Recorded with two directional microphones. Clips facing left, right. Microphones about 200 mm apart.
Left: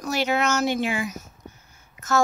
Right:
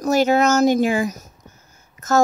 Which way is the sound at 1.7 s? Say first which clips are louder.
Right 5 dB; 40° right (ahead or behind).